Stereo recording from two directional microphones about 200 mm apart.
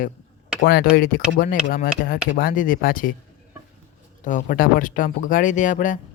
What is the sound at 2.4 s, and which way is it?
Speech, 45° left (ahead or behind).